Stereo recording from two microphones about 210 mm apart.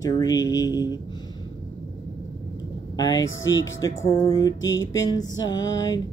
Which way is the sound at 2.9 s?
20° left (ahead or behind).